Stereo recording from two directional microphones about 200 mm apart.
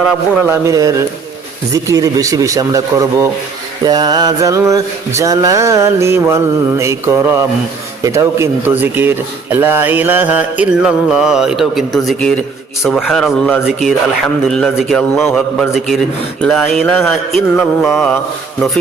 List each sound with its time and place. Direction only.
0.4 s speech: 15° right (ahead or behind)
12.8 s mantra: centre (ahead or behind)